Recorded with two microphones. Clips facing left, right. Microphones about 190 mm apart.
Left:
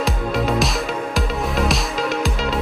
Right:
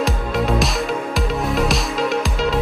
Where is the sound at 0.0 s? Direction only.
Centre (ahead or behind).